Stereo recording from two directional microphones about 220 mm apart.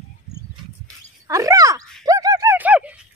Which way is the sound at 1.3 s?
15° right (ahead or behind).